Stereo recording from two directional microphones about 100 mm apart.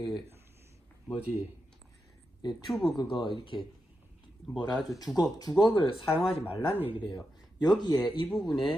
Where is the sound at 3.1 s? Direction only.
55° left (ahead or behind).